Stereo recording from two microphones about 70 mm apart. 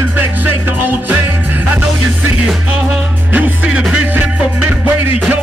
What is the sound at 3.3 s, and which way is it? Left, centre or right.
Music, centre.